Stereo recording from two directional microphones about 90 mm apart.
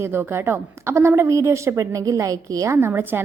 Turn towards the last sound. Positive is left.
turn(degrees=-25)  # may be behind; listen again after turning